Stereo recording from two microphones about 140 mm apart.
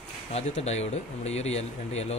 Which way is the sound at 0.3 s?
50° left (ahead or behind).